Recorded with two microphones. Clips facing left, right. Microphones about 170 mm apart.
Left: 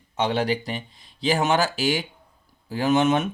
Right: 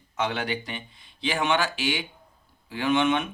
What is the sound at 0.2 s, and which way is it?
Speech, 35° left (ahead or behind).